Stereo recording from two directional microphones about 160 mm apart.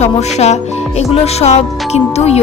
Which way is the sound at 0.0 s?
45° left (ahead or behind).